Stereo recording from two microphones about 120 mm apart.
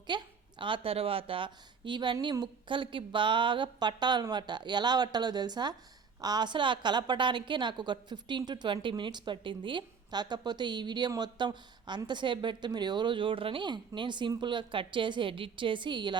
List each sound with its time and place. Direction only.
0.1 s a woman's voice: 40° right (ahead or behind)